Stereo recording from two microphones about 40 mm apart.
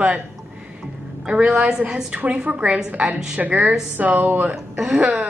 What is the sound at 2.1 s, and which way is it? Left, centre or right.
A woman's voice, right.